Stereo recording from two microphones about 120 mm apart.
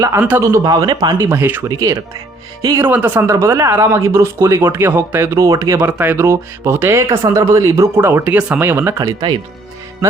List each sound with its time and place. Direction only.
0.2 s speech: 15° right (ahead or behind)
0.4 s speech: 30° right (ahead or behind)
1.6 s speech: 30° right (ahead or behind)
2.8 s speech: 15° right (ahead or behind)